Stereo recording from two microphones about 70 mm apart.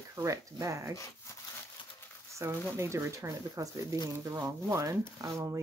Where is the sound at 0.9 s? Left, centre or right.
Left.